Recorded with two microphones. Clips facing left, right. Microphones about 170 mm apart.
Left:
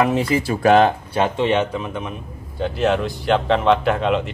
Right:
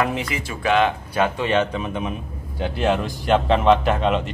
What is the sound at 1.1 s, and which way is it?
Speech, 25° left (ahead or behind).